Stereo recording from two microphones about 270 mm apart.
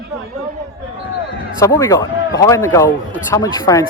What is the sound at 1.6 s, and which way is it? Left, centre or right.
Speech, centre.